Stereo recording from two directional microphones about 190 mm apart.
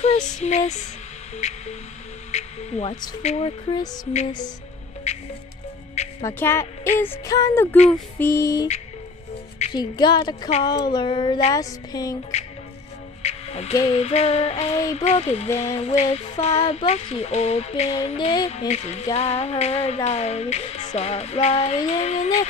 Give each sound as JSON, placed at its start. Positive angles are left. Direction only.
{"t": 0.0, "sound": "music", "side_deg": 35}
{"t": 2.3, "sound": "music", "side_deg": 35}
{"t": 3.7, "sound": "a sound", "side_deg": 20}
{"t": 6.2, "sound": "a woman's voice", "side_deg": 15}
{"t": 9.6, "sound": "a sound", "side_deg": 25}
{"t": 13.2, "sound": "music", "side_deg": 35}